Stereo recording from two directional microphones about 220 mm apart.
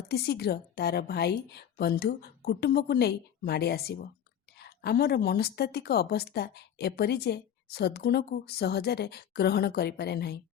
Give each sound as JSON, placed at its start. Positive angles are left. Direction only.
{"t": 0.1, "sound": "a woman's voice", "side_deg": 45}